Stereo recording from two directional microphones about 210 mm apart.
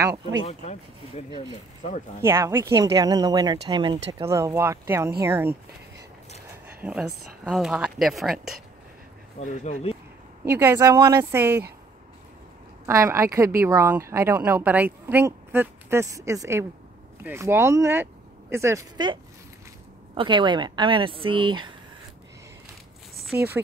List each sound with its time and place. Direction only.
0.5 s speech: 30° left (ahead or behind)
1.8 s speech: 35° left (ahead or behind)
2.2 s speech: 10° right (ahead or behind)
9.4 s speech: 35° left (ahead or behind)
10.4 s speech: 10° right (ahead or behind)
12.8 s speech: 15° right (ahead or behind)
20.2 s speech: 20° right (ahead or behind)
23.2 s speech: 10° right (ahead or behind)